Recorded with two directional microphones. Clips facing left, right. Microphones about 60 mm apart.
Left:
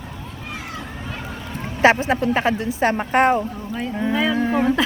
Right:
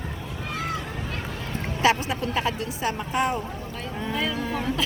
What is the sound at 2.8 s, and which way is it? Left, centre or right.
Speech, left.